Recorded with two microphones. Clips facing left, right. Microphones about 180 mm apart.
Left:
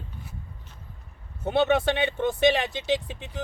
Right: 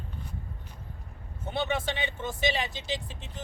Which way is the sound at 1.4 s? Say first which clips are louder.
Left 9 dB; 65° left (ahead or behind).